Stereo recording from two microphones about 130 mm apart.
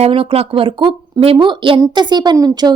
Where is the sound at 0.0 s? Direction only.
45° right (ahead or behind).